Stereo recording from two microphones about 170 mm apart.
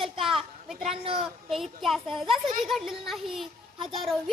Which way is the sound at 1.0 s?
30° right (ahead or behind).